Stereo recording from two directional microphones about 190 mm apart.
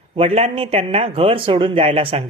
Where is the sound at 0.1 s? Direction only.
30° right (ahead or behind).